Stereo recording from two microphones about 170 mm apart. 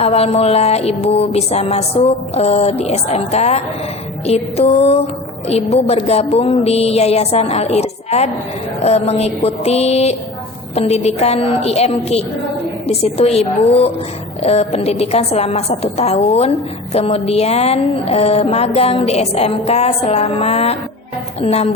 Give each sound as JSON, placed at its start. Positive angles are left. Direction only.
{"t": 0.0, "sound": "speech", "side_deg": 35}